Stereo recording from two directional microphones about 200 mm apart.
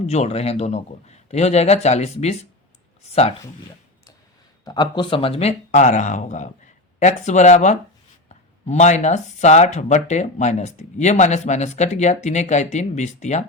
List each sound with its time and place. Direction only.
0.0 s speech: 35° left (ahead or behind)
4.6 s speech: 20° left (ahead or behind)